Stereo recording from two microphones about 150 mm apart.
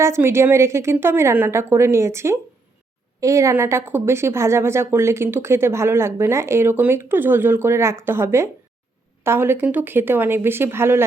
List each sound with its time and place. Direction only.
0.0 s a woman's voice: 15° right (ahead or behind)